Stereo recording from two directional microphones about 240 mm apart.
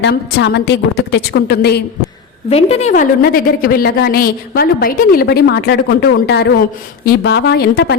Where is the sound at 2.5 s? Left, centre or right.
Left.